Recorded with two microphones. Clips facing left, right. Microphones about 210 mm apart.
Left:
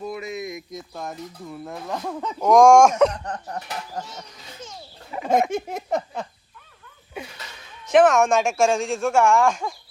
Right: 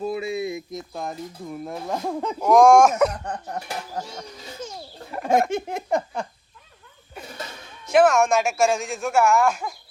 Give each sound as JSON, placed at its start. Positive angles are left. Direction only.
{"t": 0.0, "sound": "a sound", "side_deg": -30}
{"t": 1.0, "sound": "speech", "side_deg": -20}
{"t": 2.4, "sound": "speech", "side_deg": -5}
{"t": 5.5, "sound": "speech", "side_deg": 5}
{"t": 8.1, "sound": "speech", "side_deg": -10}